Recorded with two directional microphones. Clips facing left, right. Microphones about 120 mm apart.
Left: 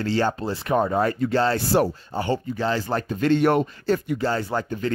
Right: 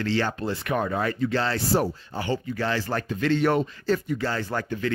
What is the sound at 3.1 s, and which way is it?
Speech, 45° left (ahead or behind).